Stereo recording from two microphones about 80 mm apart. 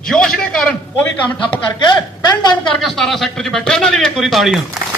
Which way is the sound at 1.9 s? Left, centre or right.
Left.